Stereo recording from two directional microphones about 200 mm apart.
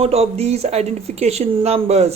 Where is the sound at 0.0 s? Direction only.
30° right (ahead or behind).